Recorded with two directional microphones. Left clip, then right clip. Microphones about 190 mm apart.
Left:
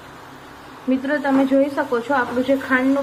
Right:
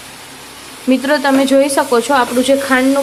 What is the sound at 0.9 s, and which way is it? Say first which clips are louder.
A woman's voice: right 7 dB; 65° right (ahead or behind).